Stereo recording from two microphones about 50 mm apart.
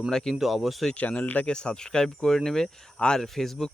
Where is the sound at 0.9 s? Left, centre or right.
Left.